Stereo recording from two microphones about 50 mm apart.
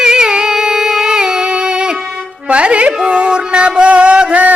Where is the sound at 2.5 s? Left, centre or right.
Right.